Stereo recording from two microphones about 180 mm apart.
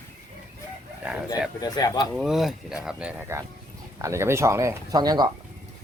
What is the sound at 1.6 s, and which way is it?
Speech, 20° left (ahead or behind).